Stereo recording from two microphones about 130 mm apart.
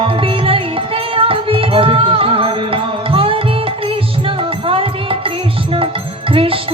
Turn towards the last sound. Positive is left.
turn(degrees=-45)  # may be behind; listen again after turning